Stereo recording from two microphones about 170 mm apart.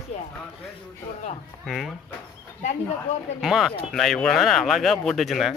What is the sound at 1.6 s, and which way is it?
Speech, centre (ahead or behind).